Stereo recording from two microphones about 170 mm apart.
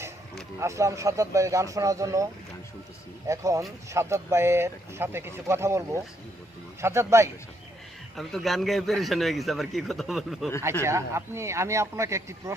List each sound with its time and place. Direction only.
0.6 s speech: 15° right (ahead or behind)
3.2 s speech: 20° right (ahead or behind)
8.1 s a man's voice: centre (ahead or behind)
10.8 s speech: 15° right (ahead or behind)